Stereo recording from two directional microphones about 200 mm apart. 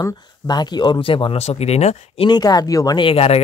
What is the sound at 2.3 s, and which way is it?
Speech, 20° left (ahead or behind).